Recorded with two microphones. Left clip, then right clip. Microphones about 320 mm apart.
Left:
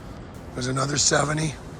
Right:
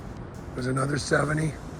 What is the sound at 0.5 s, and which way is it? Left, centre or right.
Speech, centre.